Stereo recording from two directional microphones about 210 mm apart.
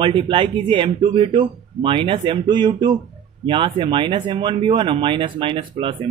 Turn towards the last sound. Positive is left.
turn(degrees=-25)  # may be behind; listen again after turning